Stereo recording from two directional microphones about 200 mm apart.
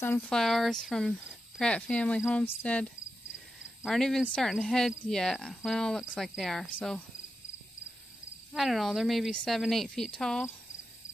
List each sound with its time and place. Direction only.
0.0 s cricket: 5° left (ahead or behind)
8.5 s cricket: centre (ahead or behind)